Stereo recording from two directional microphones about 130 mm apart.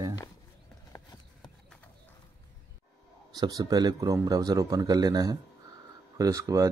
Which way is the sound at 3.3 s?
30° right (ahead or behind).